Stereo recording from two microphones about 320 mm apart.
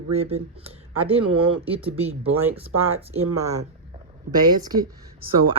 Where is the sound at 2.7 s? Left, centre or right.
Right.